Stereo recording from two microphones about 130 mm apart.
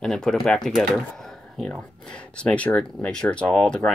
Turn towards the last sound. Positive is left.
turn(degrees=5)  # may be behind; listen again after turning